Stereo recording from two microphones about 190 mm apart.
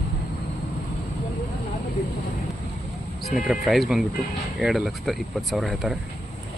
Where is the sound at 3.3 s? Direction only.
Centre (ahead or behind).